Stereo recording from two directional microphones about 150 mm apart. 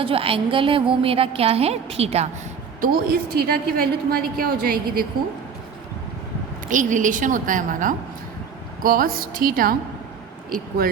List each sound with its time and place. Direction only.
0.0 s a woman's voice: 40° right (ahead or behind)
2.8 s a woman's voice: 80° right
6.7 s a woman's voice: 60° right (ahead or behind)
8.8 s a woman's voice: 75° right (ahead or behind)